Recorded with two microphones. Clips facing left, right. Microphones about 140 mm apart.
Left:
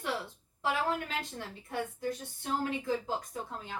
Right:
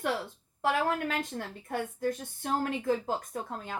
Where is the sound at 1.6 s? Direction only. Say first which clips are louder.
Right 3 dB; 50° right (ahead or behind).